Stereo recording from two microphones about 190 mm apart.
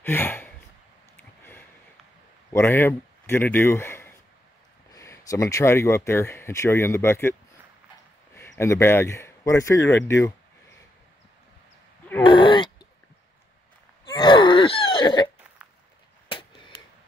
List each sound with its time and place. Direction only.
0.0 s sigh: 10° left (ahead or behind)
1.1 s a sound: 10° left (ahead or behind)
2.5 s speech: 10° left (ahead or behind)
8.4 s speech: 15° left (ahead or behind)
12.2 s groan: 25° left (ahead or behind)
14.0 s wheeze: 25° left (ahead or behind)
16.3 s a sound: 25° left (ahead or behind)